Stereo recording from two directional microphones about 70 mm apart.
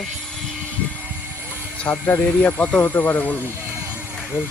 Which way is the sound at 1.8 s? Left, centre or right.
Centre.